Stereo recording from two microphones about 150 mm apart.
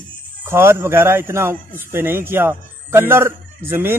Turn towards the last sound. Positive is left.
turn(degrees=-15)  # may be behind; listen again after turning